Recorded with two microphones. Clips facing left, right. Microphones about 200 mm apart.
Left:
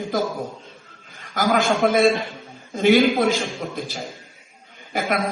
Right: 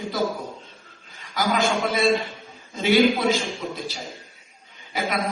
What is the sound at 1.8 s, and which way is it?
A man's voice, 50° left (ahead or behind).